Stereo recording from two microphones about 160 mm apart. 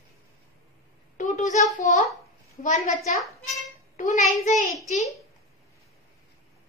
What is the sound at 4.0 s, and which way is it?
Speech, 50° left (ahead or behind).